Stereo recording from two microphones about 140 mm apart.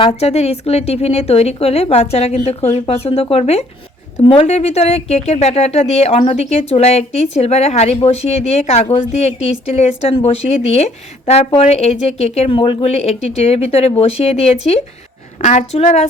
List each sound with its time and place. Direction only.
0.0 s a woman's voice: 50° left (ahead or behind)